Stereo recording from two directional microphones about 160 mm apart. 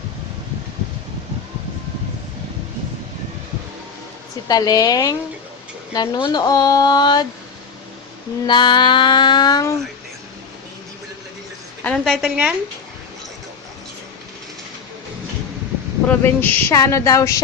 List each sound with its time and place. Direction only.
4.4 s speech: 25° left (ahead or behind)
8.4 s speech: 30° left (ahead or behind)
11.8 s a woman's voice: 5° left (ahead or behind)
16.0 s speech: 10° left (ahead or behind)